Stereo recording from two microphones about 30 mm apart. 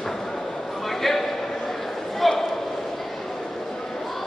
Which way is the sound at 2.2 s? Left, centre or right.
Centre.